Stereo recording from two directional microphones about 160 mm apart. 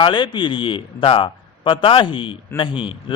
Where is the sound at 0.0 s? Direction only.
30° left (ahead or behind).